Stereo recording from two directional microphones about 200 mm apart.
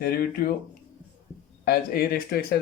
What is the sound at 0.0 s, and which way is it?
Speech, 45° left (ahead or behind).